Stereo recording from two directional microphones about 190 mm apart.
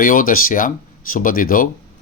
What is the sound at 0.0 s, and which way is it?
Speech, 45° left (ahead or behind).